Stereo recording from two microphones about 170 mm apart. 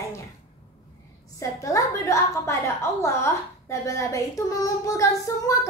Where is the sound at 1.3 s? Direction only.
20° left (ahead or behind).